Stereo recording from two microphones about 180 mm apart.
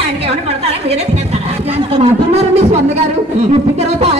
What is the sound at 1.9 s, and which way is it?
Speech, 35° right (ahead or behind).